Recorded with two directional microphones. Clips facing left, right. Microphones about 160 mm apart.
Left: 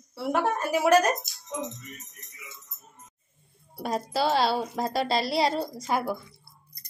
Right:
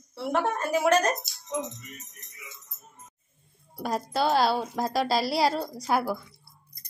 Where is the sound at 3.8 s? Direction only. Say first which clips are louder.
Even; centre (ahead or behind).